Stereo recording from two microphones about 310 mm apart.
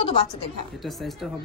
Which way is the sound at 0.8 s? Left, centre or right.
Centre.